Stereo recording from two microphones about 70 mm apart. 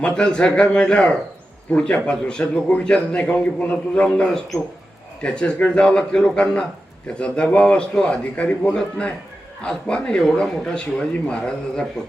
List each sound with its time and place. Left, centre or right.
0.0 s a man's voice: centre